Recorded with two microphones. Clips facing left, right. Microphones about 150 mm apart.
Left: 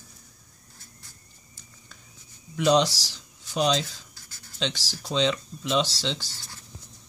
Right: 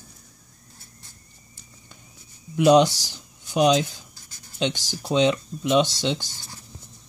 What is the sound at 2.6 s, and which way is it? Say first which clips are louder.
Speech: right 5 dB; 55° right (ahead or behind).